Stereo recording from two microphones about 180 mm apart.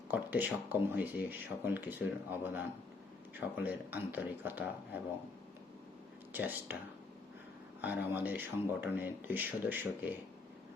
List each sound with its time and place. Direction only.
0.1 s speech: 10° right (ahead or behind)
6.3 s speech: 10° right (ahead or behind)
7.8 s speech: 10° right (ahead or behind)